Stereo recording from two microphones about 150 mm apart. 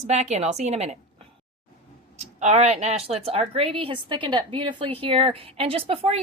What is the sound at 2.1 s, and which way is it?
A woman's voice, 45° right (ahead or behind).